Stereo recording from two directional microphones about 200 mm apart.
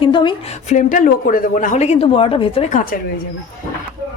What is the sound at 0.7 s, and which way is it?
Speech, 40° left (ahead or behind).